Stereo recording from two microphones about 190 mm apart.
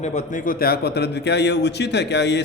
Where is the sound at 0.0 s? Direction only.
40° left (ahead or behind).